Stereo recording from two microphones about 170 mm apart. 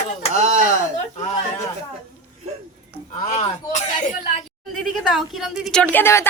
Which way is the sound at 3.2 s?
35° left (ahead or behind).